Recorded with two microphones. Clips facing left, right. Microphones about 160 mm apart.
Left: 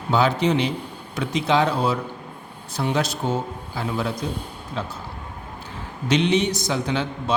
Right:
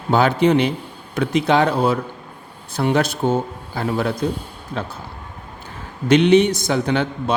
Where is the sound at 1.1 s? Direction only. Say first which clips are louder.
Right 4 dB; 55° right (ahead or behind).